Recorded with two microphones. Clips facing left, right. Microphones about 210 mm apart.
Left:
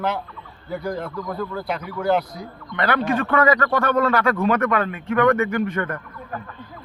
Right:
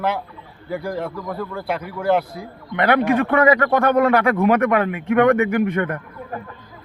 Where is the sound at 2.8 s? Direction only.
60° right (ahead or behind).